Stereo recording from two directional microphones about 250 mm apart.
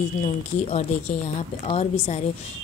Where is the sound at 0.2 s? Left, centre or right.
Left.